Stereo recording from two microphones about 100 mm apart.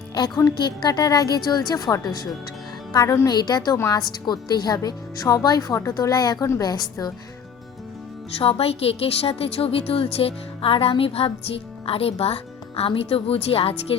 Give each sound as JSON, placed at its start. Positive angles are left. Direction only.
{"t": 0.8, "sound": "speech", "side_deg": 45}
{"t": 3.3, "sound": "a woman's voice", "side_deg": 45}
{"t": 3.8, "sound": "a woman's voice", "side_deg": 30}
{"t": 4.3, "sound": "speech", "side_deg": 45}
{"t": 8.4, "sound": "a woman's voice", "side_deg": 75}